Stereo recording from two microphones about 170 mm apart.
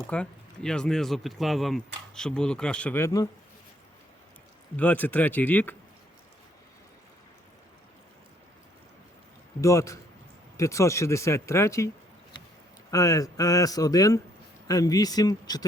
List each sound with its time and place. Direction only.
0.1 s speech: 5° left (ahead or behind)
4.8 s speech: 10° left (ahead or behind)
9.6 s speech: 20° left (ahead or behind)
12.9 s speech: 20° left (ahead or behind)